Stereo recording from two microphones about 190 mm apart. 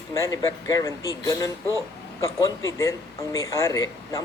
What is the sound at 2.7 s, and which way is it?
A woman's voice, 15° left (ahead or behind).